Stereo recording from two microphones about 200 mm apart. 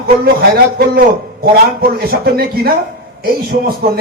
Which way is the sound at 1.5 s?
50° right (ahead or behind).